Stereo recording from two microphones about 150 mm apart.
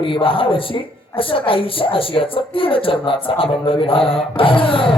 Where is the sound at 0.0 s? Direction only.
35° left (ahead or behind).